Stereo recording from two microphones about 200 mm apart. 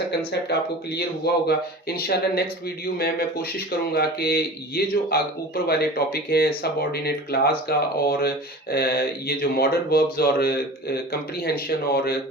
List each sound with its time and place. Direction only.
0.3 s speech: 55° left (ahead or behind)